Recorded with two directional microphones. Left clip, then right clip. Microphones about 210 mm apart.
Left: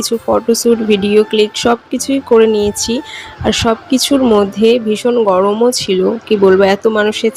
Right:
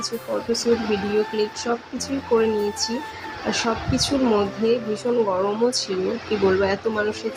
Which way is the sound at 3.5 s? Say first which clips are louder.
Left 9 dB; 35° left (ahead or behind).